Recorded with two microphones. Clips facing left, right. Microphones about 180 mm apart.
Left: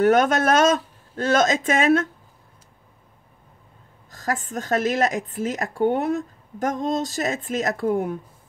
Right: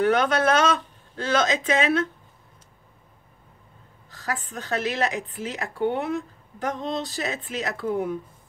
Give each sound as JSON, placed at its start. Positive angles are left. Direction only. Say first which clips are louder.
{"t": 0.0, "sound": "a woman's voice", "louder": "left 3 dB", "side_deg": 45}
{"t": 4.1, "sound": "a woman's voice", "louder": "left 5 dB", "side_deg": 45}